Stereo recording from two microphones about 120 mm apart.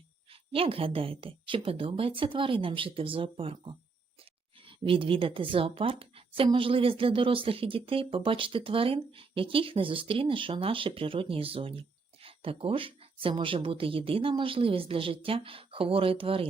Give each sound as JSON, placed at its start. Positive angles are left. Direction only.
{"t": 0.3, "sound": "speech", "side_deg": -50}